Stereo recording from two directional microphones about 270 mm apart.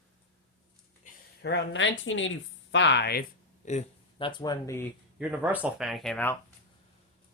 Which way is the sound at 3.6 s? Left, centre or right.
Left.